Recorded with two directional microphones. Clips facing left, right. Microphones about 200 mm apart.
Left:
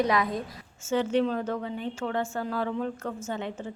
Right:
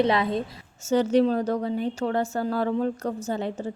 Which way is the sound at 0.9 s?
40° right (ahead or behind).